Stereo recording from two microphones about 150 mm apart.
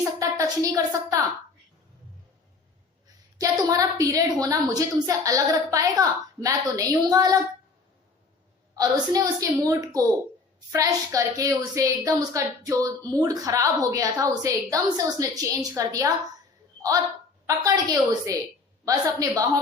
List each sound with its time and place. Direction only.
0.0 s a woman's voice: 20° right (ahead or behind)
3.7 s a woman's voice: 25° right (ahead or behind)
8.7 s a woman's voice: 25° right (ahead or behind)
17.4 s a woman's voice: 20° right (ahead or behind)